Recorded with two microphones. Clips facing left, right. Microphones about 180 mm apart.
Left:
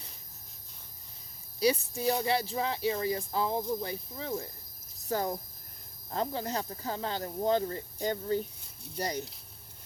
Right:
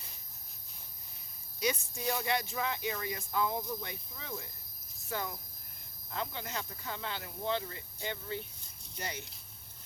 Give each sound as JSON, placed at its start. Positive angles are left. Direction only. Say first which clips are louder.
{"t": 1.5, "sound": "speech", "louder": "left 7 dB", "side_deg": 35}